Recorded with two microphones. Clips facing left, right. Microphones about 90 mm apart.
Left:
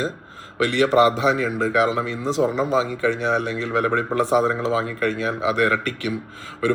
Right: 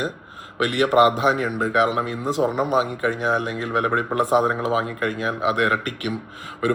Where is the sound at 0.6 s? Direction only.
50° right (ahead or behind).